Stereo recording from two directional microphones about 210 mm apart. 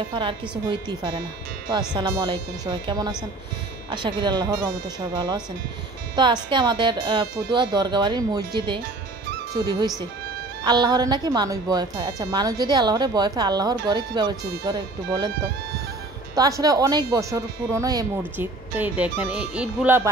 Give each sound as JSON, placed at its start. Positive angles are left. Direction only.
{"t": 0.1, "sound": "speech", "side_deg": -25}
{"t": 16.3, "sound": "speech", "side_deg": -15}